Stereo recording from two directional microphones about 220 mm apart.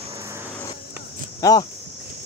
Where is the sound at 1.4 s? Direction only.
15° left (ahead or behind).